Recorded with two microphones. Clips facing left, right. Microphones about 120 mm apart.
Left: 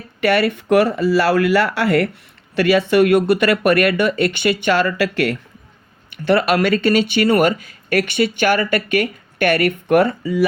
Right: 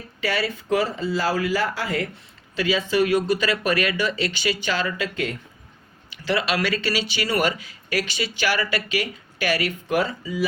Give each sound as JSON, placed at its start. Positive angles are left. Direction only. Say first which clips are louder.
{"t": 0.2, "sound": "speech", "louder": "left 9 dB", "side_deg": 60}
{"t": 6.2, "sound": "speech", "louder": "left 8 dB", "side_deg": 55}